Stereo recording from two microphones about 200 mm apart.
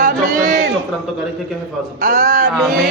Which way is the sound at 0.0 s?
35° right (ahead or behind).